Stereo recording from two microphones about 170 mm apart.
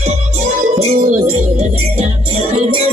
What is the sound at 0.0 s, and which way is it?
Music, 40° right (ahead or behind).